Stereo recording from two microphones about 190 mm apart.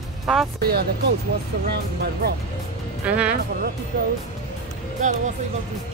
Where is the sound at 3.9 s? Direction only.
50° right (ahead or behind).